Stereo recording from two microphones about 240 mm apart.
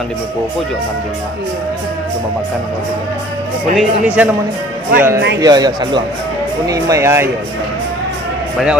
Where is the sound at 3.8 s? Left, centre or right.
Centre.